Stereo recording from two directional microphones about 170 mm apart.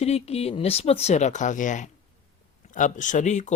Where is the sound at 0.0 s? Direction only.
35° left (ahead or behind).